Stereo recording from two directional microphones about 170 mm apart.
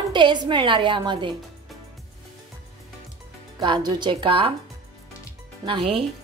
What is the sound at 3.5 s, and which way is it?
Speech, 25° right (ahead or behind).